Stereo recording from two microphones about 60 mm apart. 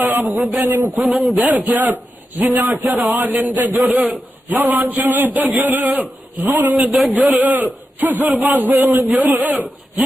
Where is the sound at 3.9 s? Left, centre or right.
Centre.